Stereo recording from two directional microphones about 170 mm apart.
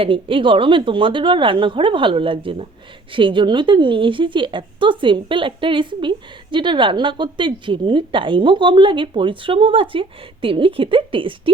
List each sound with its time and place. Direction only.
0.0 s a woman's voice: 30° right (ahead or behind)